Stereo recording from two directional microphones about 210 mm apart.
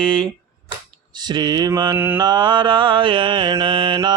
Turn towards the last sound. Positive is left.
turn(degrees=-20)  # may be behind; listen again after turning